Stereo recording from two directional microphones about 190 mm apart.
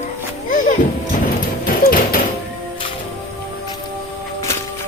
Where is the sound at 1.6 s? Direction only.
50° left (ahead or behind).